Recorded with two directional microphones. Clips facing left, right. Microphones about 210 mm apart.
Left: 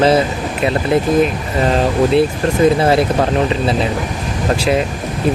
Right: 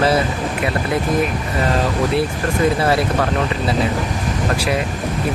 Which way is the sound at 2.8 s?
20° left (ahead or behind).